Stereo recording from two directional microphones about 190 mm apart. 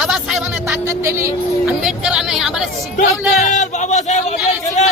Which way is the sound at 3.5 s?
40° left (ahead or behind).